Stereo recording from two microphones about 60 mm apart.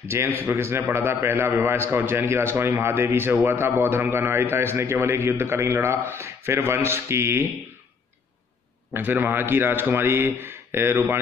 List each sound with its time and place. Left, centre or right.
0.1 s a man's voice: right
8.9 s speech: right